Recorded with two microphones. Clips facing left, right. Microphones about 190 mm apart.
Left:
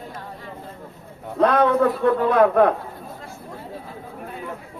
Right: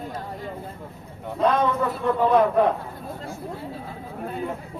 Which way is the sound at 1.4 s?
60° left (ahead or behind).